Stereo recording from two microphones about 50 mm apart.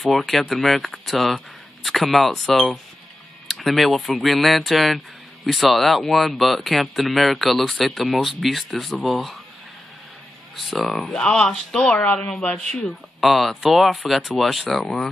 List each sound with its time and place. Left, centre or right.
0.0 s a man's voice: centre
10.5 s a man's voice: centre
11.1 s speech: centre
13.2 s a man's voice: centre
13.8 s a man's voice: centre